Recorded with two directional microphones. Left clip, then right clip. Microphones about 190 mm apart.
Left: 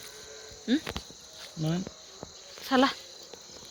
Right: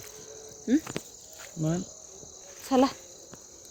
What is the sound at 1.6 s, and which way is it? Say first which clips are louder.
Cricket: right 2 dB; 50° right (ahead or behind).